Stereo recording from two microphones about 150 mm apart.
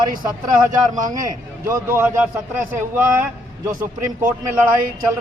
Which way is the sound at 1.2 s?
15° right (ahead or behind).